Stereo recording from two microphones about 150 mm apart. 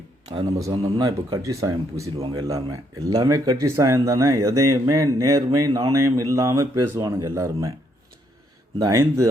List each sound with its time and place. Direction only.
0.3 s speech: 30° right (ahead or behind)
8.8 s speech: 20° right (ahead or behind)